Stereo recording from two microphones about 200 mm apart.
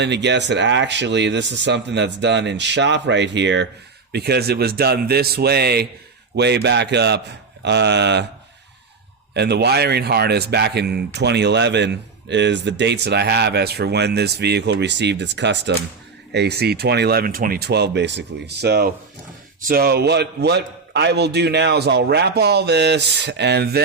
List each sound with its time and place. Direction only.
0.0 s a man's voice: 60° right (ahead or behind)
9.3 s speech: 55° right (ahead or behind)